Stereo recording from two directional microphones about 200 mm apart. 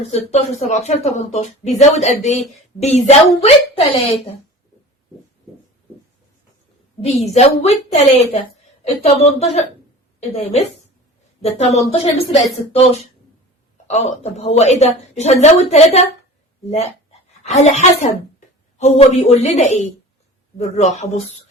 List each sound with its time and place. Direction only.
0.1 s speech: 35° left (ahead or behind)
7.0 s speech: 30° left (ahead or behind)
8.8 s a woman's voice: 30° left (ahead or behind)